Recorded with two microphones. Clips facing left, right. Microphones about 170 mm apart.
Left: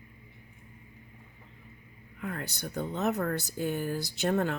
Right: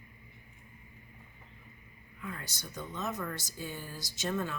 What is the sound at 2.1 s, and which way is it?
Speech, 60° left (ahead or behind).